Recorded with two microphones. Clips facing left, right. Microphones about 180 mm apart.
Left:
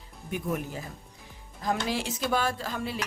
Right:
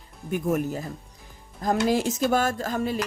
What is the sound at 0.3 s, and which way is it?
Speech, 45° right (ahead or behind).